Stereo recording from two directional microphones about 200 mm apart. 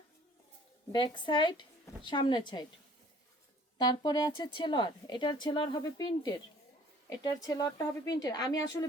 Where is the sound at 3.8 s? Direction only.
20° left (ahead or behind).